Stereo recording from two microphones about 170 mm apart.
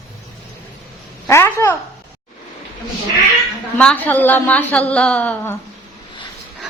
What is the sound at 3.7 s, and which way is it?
A woman's voice, 10° left (ahead or behind).